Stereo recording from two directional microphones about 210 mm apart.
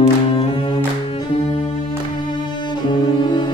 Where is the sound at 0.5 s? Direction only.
25° left (ahead or behind).